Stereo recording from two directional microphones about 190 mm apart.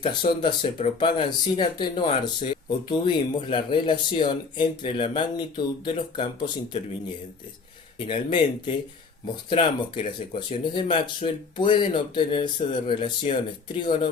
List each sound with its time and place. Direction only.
0.0 s speech: 25° left (ahead or behind)
7.9 s speech: 25° left (ahead or behind)